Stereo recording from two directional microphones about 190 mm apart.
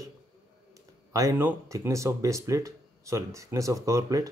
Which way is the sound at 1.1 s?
15° right (ahead or behind).